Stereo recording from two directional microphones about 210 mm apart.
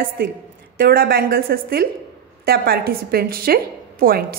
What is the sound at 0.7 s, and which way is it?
A woman's voice, 45° right (ahead or behind).